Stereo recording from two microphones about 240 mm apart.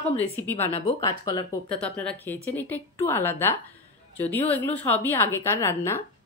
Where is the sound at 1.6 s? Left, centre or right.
Centre.